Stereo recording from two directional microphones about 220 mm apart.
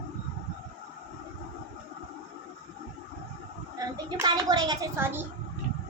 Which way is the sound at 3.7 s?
20° right (ahead or behind).